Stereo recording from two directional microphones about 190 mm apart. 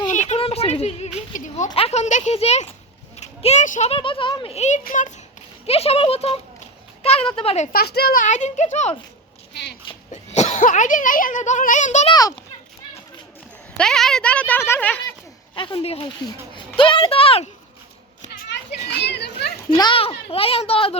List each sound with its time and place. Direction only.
0.1 s a sound: 40° left (ahead or behind)
1.3 s a child's voice: 40° left (ahead or behind)
5.6 s a child's voice: 30° left (ahead or behind)
7.7 s a child's voice: 55° left (ahead or behind); by 9.0 s 35° left (ahead or behind)
9.5 s speech: 65° left (ahead or behind)
9.9 s speech: 35° left (ahead or behind)
13.7 s speech: 5° left (ahead or behind)
15.5 s a woman's voice: 25° left (ahead or behind)
18.3 s children playing: 60° left (ahead or behind)
19.7 s a woman's voice: 25° left (ahead or behind)